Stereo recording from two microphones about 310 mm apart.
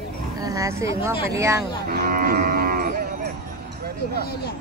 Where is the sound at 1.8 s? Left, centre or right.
Right.